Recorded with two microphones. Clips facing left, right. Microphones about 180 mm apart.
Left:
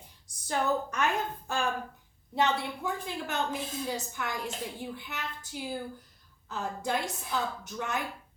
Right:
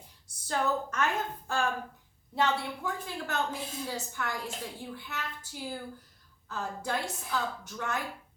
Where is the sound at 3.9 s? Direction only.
20° left (ahead or behind).